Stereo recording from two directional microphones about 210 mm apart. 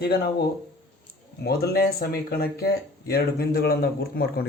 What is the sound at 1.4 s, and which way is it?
Speech, 50° left (ahead or behind).